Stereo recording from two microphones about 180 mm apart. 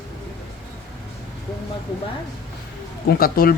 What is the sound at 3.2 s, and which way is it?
Speech, 55° left (ahead or behind).